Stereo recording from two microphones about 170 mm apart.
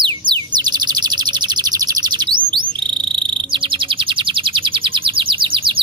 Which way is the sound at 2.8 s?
30° right (ahead or behind).